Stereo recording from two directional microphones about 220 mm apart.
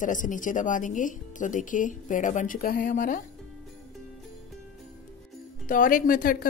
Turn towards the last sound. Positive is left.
turn(degrees=40)  # may be behind; listen again after turning